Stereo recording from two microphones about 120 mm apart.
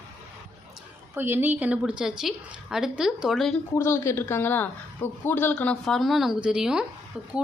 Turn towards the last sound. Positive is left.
turn(degrees=-5)  # may be behind; listen again after turning